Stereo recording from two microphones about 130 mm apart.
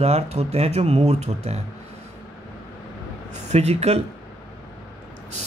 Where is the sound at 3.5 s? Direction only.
55° right (ahead or behind).